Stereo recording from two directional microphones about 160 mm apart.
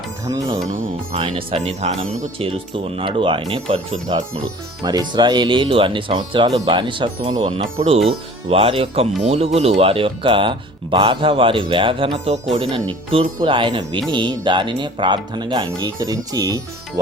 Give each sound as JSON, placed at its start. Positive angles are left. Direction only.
{"t": 0.3, "sound": "speech", "side_deg": -20}
{"t": 1.4, "sound": "speech", "side_deg": -35}